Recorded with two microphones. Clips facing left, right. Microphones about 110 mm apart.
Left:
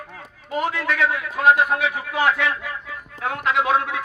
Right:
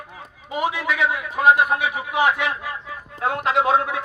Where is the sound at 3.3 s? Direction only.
30° right (ahead or behind).